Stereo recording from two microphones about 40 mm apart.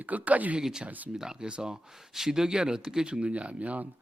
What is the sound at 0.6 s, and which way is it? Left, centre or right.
Speech, centre.